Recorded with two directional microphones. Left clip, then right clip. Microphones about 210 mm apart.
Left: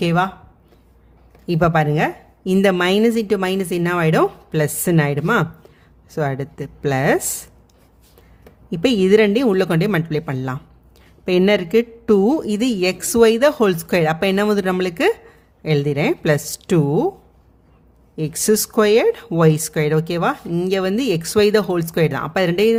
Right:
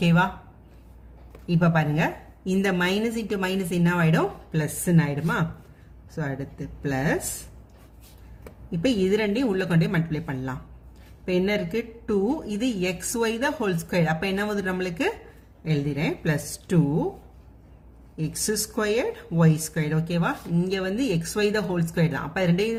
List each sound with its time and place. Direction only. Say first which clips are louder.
0.0 s speech: left 5 dB; 40° left (ahead or behind)
1.5 s speech: left 8 dB; 45° left (ahead or behind)
8.7 s speech: left 9 dB; 50° left (ahead or behind)
18.2 s speech: left 10 dB; 50° left (ahead or behind)